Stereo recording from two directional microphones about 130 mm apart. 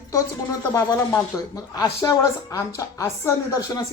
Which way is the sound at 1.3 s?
25° left (ahead or behind).